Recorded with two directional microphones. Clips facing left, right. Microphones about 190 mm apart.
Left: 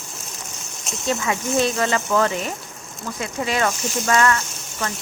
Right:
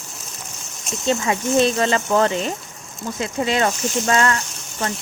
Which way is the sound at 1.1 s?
30° right (ahead or behind).